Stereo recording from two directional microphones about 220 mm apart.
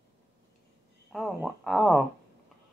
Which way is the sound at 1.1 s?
Centre (ahead or behind).